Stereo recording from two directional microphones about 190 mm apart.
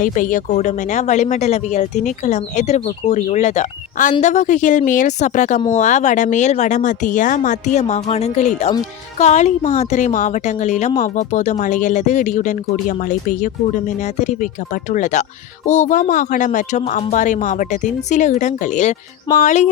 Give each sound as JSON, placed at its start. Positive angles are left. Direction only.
{"t": 0.0, "sound": "a woman's voice", "side_deg": 45}